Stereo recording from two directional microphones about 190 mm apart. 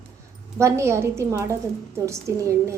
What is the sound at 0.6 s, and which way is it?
A woman's voice, 15° right (ahead or behind).